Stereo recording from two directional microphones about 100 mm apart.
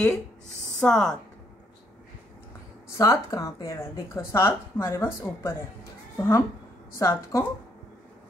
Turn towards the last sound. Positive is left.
turn(degrees=30)  # may be behind; listen again after turning